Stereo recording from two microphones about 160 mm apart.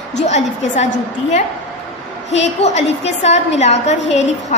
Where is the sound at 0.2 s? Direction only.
45° left (ahead or behind).